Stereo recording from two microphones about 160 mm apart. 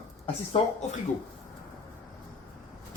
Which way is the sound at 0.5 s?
45° left (ahead or behind).